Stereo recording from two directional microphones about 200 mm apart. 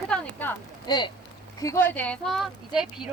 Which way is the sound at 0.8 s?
20° left (ahead or behind).